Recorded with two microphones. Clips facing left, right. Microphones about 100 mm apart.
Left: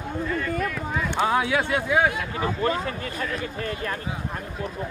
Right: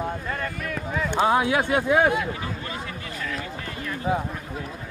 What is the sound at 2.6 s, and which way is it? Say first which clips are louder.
Speech: left 8 dB; 45° left (ahead or behind).